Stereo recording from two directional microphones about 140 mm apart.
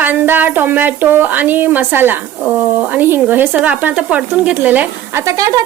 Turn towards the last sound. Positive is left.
turn(degrees=-25)  # may be behind; listen again after turning